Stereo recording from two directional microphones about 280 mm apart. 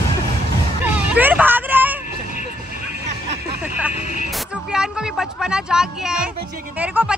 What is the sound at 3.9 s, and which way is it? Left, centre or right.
Music, left.